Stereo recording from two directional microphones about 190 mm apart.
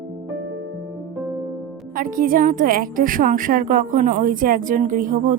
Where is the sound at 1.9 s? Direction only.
45° right (ahead or behind).